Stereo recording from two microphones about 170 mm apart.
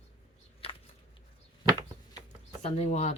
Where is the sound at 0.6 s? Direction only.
35° left (ahead or behind).